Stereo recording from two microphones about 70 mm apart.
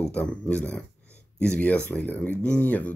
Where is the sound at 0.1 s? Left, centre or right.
Centre.